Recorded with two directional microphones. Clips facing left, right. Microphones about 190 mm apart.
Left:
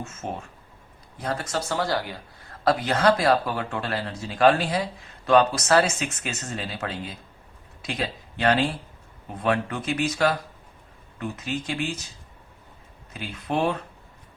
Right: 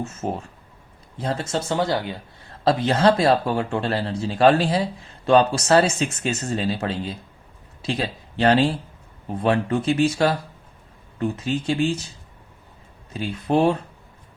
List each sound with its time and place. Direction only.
0.0 s speech: 35° right (ahead or behind)
13.1 s speech: 30° right (ahead or behind)